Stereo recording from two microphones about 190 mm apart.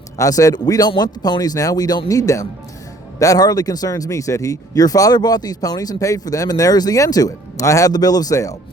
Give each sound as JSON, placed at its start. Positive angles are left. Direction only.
{"t": 0.2, "sound": "speech", "side_deg": 20}